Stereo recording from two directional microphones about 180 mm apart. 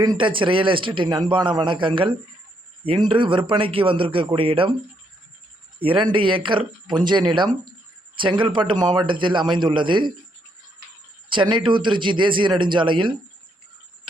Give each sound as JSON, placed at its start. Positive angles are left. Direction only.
{"t": 0.0, "sound": "a man's voice", "side_deg": -25}
{"t": 5.8, "sound": "a man's voice", "side_deg": -30}
{"t": 11.3, "sound": "a man's voice", "side_deg": -25}